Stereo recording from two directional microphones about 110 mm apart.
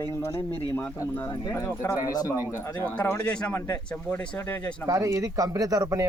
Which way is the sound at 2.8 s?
15° left (ahead or behind).